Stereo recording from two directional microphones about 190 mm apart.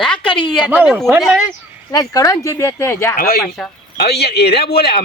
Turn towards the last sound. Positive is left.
turn(degrees=55)  # may be behind; listen again after turning